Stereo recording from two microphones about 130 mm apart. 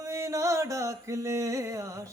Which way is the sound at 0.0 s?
25° right (ahead or behind).